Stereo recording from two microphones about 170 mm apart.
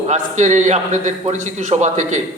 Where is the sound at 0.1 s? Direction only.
45° right (ahead or behind).